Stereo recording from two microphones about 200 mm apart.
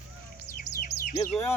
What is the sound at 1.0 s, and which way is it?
Chirp, 45° left (ahead or behind).